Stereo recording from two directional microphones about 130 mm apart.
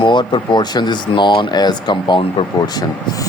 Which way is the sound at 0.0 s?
40° left (ahead or behind).